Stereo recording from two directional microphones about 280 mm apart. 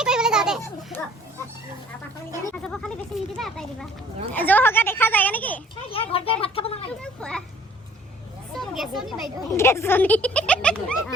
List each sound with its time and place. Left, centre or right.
0.0 s children playing: centre
2.5 s speech: centre
5.9 s speech: centre
7.0 s speech: centre
8.5 s speech: centre